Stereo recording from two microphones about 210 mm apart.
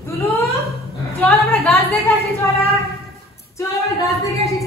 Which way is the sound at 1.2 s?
5° left (ahead or behind).